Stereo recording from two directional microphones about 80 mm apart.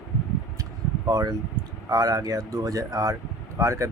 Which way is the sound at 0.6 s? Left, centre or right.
Right.